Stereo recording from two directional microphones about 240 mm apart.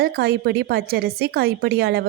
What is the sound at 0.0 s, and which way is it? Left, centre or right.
Speech, right.